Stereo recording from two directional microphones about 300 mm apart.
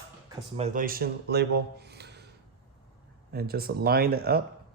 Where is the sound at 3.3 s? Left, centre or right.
Right.